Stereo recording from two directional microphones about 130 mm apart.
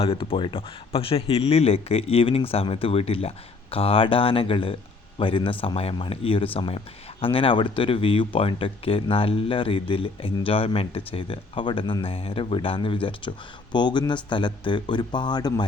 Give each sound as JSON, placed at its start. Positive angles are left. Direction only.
{"t": 0.0, "sound": "speech", "side_deg": 45}